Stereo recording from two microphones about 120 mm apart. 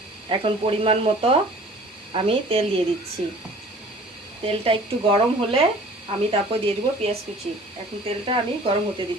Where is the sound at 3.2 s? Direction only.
60° right (ahead or behind).